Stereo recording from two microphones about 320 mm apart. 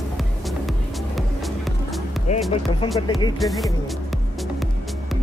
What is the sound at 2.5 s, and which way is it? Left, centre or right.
Speech, centre.